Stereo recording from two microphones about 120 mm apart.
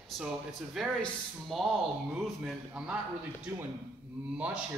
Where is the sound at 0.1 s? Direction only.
Centre (ahead or behind).